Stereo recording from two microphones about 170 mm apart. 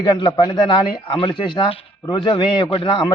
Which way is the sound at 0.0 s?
25° left (ahead or behind).